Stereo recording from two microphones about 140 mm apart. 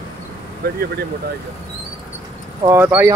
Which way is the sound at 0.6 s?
90° right.